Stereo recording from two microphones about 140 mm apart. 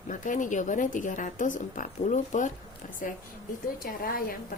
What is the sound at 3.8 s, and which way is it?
Speech, 90° left.